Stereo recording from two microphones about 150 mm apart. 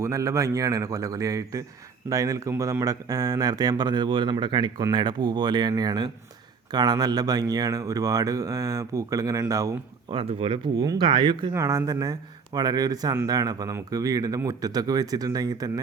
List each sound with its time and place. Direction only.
0.0 s speech: 20° right (ahead or behind)
10.1 s speech: 40° right (ahead or behind)
11.5 s speech: 20° right (ahead or behind)